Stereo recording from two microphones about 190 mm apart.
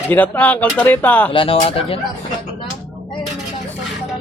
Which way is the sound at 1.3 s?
25° left (ahead or behind).